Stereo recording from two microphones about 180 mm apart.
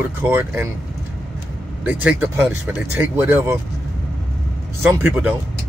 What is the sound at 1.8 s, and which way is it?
Speech, 10° right (ahead or behind).